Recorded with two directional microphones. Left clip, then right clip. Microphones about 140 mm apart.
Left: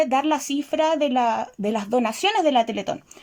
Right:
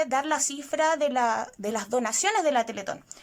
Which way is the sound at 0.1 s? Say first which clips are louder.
Left 5 dB; 15° left (ahead or behind).